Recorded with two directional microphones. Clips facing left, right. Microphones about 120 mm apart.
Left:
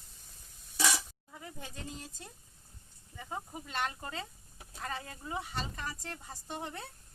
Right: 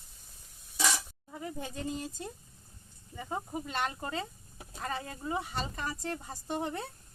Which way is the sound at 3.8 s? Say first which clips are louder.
Right 4 dB; 15° right (ahead or behind).